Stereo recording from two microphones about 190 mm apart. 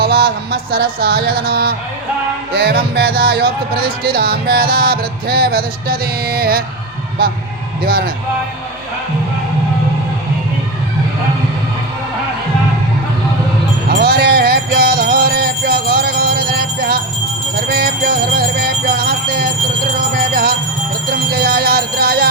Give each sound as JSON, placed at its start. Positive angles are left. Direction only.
{"t": 0.5, "sound": "a woman's voice", "side_deg": -55}
{"t": 7.9, "sound": "speech", "side_deg": -50}
{"t": 13.9, "sound": "music", "side_deg": -55}
{"t": 17.7, "sound": "speech", "side_deg": -55}
{"t": 20.0, "sound": "music", "side_deg": -50}
{"t": 21.1, "sound": "speech", "side_deg": -55}